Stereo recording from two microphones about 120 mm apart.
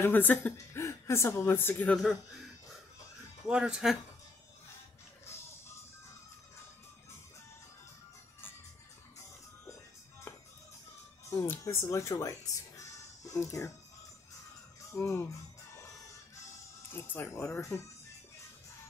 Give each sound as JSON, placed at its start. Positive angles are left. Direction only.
{"t": 0.0, "sound": "a woman's voice", "side_deg": 15}
{"t": 3.4, "sound": "speech", "side_deg": -10}
{"t": 10.3, "sound": "music", "side_deg": 25}
{"t": 11.2, "sound": "speech", "side_deg": 20}
{"t": 15.0, "sound": "speech", "side_deg": 20}
{"t": 16.9, "sound": "speech", "side_deg": 20}